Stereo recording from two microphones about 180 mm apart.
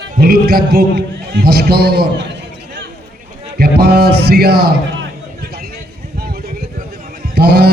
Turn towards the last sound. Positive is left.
turn(degrees=-65)  # may be behind; listen again after turning